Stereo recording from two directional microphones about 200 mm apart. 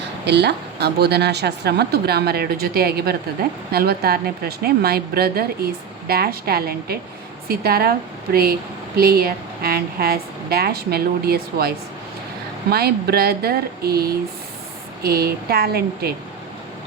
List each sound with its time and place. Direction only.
0.3 s a woman's voice: 55° right (ahead or behind)
12.7 s a woman's voice: 50° right (ahead or behind)